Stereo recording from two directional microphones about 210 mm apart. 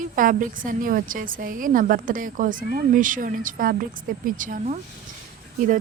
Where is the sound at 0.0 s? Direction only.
40° right (ahead or behind).